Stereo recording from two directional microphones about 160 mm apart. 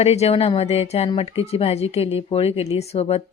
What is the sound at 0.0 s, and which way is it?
Speech, 40° left (ahead or behind).